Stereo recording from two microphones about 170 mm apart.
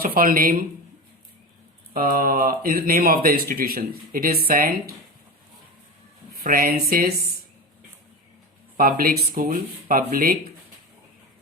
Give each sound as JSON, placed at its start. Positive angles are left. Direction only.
{"t": 0.0, "sound": "speech", "side_deg": -55}
{"t": 1.9, "sound": "speech", "side_deg": -60}
{"t": 6.3, "sound": "speech", "side_deg": -60}
{"t": 8.8, "sound": "speech", "side_deg": -60}